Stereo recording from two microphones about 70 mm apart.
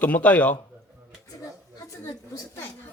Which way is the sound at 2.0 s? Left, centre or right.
Left.